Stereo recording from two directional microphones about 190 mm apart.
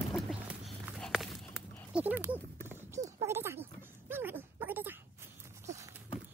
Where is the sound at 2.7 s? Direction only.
15° right (ahead or behind).